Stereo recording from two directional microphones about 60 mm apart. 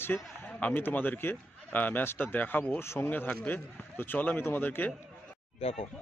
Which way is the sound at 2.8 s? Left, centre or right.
Left.